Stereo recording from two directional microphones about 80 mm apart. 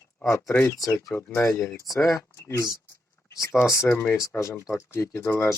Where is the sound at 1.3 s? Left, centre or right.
Left.